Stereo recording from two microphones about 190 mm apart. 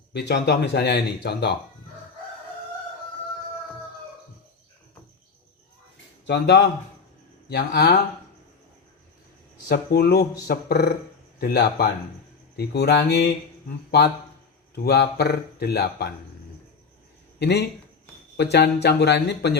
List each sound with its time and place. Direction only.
0.1 s speech: 60° left (ahead or behind)
6.2 s speech: 65° left (ahead or behind)
9.6 s speech: 55° left (ahead or behind)
14.8 s speech: 60° left (ahead or behind)
17.4 s speech: 60° left (ahead or behind)